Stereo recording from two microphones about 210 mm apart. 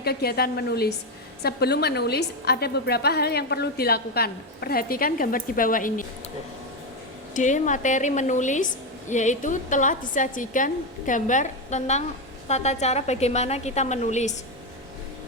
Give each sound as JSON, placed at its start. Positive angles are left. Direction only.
{"t": 0.0, "sound": "a woman's voice", "side_deg": 50}
{"t": 7.3, "sound": "a woman's voice", "side_deg": 35}